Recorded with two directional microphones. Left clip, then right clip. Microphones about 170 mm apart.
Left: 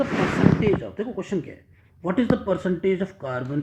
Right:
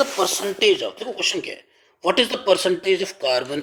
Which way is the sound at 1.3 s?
45° right (ahead or behind).